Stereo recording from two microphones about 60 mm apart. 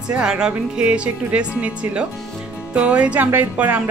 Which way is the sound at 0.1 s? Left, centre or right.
Centre.